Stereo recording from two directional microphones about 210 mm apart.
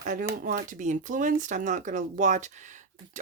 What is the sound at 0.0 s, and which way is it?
Speech, 40° right (ahead or behind).